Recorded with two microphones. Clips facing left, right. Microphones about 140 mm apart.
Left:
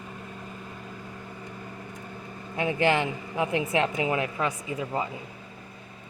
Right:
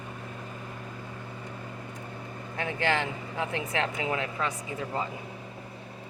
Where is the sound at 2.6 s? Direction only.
15° left (ahead or behind).